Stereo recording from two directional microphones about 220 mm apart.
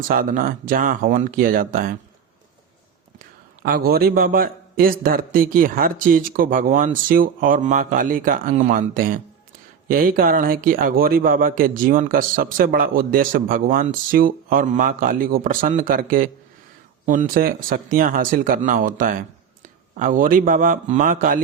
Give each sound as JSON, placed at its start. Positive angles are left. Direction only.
{"t": 0.1, "sound": "a man's voice", "side_deg": -40}
{"t": 3.6, "sound": "a man's voice", "side_deg": -40}